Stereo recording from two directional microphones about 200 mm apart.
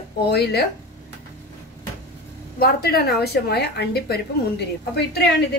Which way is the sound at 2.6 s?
50° left (ahead or behind).